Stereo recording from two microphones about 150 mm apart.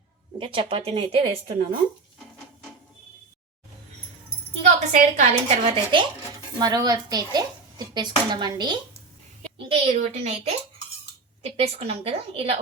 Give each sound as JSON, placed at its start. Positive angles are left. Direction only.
{"t": 0.3, "sound": "speech", "side_deg": -35}
{"t": 4.9, "sound": "speech", "side_deg": -50}
{"t": 6.6, "sound": "speech", "side_deg": -25}
{"t": 9.6, "sound": "speech", "side_deg": -40}